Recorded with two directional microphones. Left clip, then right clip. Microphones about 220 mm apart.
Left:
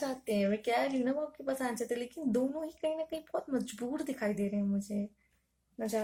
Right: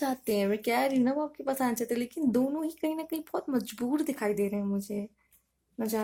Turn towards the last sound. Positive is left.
turn(degrees=-40)  # may be behind; listen again after turning